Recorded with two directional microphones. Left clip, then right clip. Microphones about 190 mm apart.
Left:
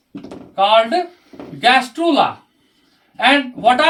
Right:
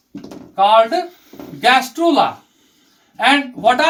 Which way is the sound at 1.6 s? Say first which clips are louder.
Even; 15° left (ahead or behind).